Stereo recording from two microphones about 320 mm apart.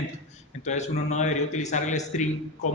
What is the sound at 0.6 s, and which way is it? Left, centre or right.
A man's voice, left.